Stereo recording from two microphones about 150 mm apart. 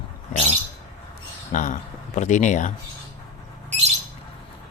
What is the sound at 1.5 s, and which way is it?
Speech, 55° left (ahead or behind).